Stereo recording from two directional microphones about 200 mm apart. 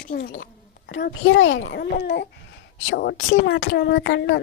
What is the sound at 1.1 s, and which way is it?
A woman's voice, 70° left (ahead or behind).